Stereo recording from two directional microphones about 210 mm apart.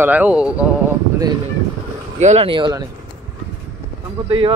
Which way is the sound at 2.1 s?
30° right (ahead or behind).